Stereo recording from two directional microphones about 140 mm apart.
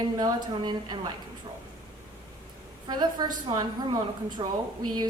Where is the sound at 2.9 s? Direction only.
30° right (ahead or behind).